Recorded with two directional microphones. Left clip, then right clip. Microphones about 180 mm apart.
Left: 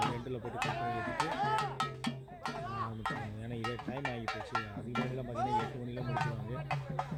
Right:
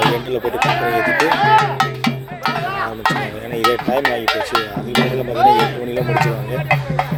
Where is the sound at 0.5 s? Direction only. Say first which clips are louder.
Right 19 dB; 15° left (ahead or behind).